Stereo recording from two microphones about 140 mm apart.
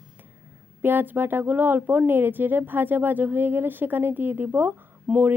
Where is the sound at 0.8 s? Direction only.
15° right (ahead or behind).